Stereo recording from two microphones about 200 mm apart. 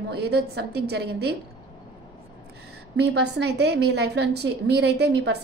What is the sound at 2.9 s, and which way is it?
A woman's voice, 55° right (ahead or behind).